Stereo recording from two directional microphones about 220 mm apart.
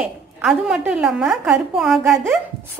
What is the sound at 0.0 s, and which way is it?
A woman's voice, centre (ahead or behind).